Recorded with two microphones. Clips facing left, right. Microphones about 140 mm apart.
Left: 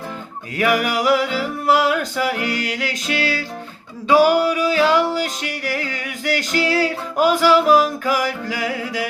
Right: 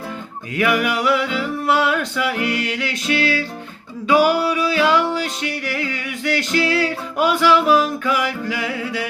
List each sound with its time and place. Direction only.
0.5 s music: 40° left (ahead or behind)